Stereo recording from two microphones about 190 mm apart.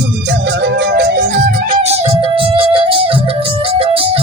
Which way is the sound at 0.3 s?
65° right (ahead or behind).